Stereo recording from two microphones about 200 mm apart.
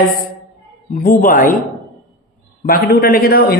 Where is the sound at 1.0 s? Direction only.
45° left (ahead or behind).